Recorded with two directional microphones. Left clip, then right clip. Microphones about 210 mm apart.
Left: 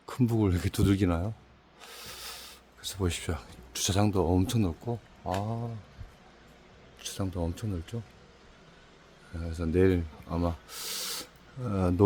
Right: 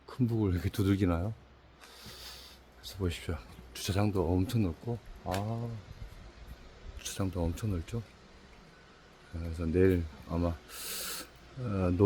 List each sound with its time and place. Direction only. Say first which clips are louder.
0.0 s speech: left 4 dB; 30° left (ahead or behind); by 1.3 s 15° left (ahead or behind)
1.9 s a sound: left 6 dB; 30° left (ahead or behind)
5.4 s speech: left 3 dB; 15° left (ahead or behind)
7.0 s speech: left 1 dB; 5° left (ahead or behind)
9.4 s speech: left 2 dB; 15° left (ahead or behind)